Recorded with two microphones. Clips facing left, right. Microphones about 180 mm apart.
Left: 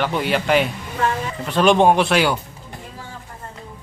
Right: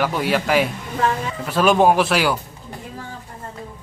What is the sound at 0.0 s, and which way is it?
Speech, centre (ahead or behind).